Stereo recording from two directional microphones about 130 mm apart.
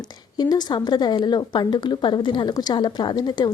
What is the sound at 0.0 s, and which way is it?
A woman's voice, 30° left (ahead or behind).